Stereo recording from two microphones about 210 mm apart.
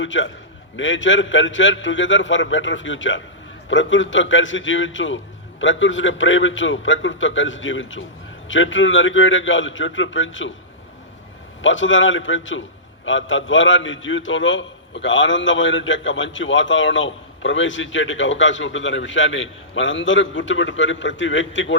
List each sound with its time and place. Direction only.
0.0 s a man's voice: 65° left (ahead or behind)
11.6 s a man's voice: 65° left (ahead or behind)